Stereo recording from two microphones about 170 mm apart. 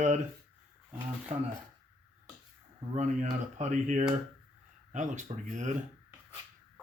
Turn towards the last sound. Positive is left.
turn(degrees=-45)  # may be behind; listen again after turning